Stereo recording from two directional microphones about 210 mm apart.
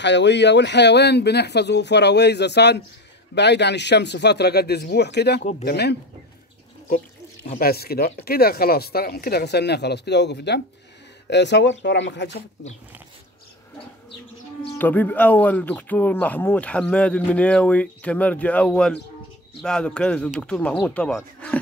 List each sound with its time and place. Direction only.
0.0 s speech: 55° left (ahead or behind)
5.4 s speech: 35° left (ahead or behind)
5.7 s speech: 50° left (ahead or behind)
7.4 s speech: 40° left (ahead or behind); by 12.4 s 55° left (ahead or behind)
14.8 s speech: 10° left (ahead or behind)